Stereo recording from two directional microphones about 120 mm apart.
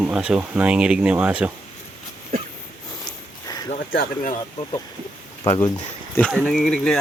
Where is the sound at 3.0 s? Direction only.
35° left (ahead or behind).